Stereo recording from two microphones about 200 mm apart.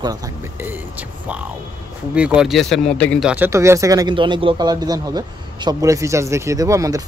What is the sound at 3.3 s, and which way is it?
Speech, 10° right (ahead or behind).